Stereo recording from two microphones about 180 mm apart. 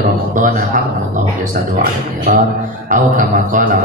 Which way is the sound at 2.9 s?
50° right (ahead or behind).